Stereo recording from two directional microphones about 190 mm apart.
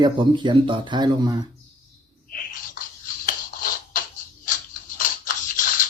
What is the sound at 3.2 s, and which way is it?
Music, 50° left (ahead or behind).